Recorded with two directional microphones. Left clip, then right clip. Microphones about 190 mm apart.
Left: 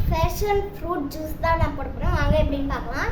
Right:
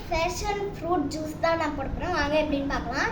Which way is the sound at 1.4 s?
20° left (ahead or behind).